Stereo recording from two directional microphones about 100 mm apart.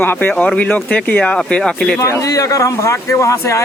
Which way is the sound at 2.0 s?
30° left (ahead or behind).